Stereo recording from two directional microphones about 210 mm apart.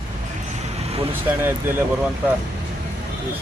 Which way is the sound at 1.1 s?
10° right (ahead or behind).